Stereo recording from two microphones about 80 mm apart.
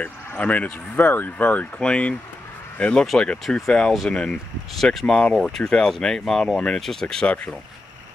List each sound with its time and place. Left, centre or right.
0.0 s speech: centre